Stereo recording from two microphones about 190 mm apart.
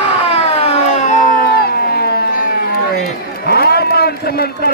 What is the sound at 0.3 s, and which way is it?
Siren, 30° left (ahead or behind).